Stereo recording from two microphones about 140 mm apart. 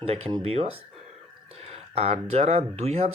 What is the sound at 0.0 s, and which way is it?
Speech, 45° right (ahead or behind).